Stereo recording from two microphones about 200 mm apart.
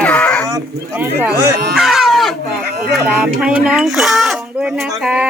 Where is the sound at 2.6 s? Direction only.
50° right (ahead or behind).